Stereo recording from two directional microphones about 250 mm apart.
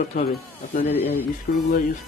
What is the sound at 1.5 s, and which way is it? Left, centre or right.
Speech, left.